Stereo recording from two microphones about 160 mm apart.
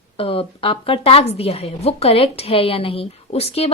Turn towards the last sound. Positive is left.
turn(degrees=40)  # may be behind; listen again after turning